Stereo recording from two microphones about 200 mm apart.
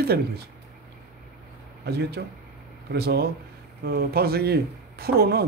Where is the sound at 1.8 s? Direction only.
55° right (ahead or behind).